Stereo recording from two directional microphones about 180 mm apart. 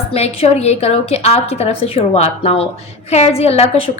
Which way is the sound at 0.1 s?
35° left (ahead or behind).